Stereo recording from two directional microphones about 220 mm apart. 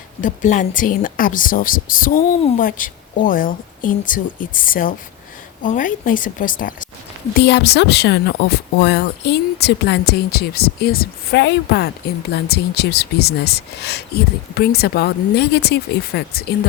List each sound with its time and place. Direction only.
0.2 s speech: 35° left (ahead or behind)
7.4 s speech: 50° left (ahead or behind)